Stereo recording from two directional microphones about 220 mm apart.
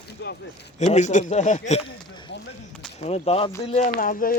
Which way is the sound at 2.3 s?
50° left (ahead or behind).